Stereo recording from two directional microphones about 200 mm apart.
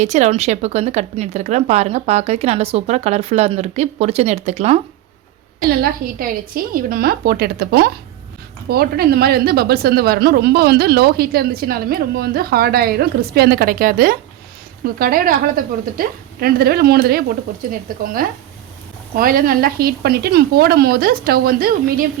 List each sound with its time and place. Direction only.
0.0 s speech: 35° right (ahead or behind)
5.6 s a woman's voice: 45° right (ahead or behind)